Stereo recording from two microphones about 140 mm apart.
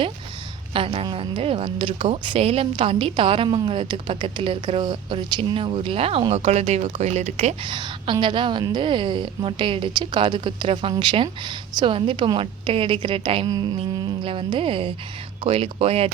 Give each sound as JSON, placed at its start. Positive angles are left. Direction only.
{"t": 0.7, "sound": "a woman's voice", "side_deg": -40}
{"t": 7.6, "sound": "a woman's voice", "side_deg": -35}